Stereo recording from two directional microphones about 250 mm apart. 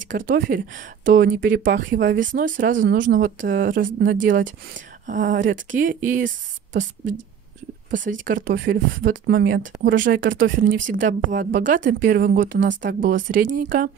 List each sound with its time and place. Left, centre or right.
0.1 s speech: right